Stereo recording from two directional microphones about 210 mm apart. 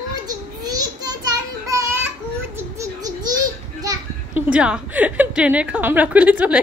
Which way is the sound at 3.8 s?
15° right (ahead or behind).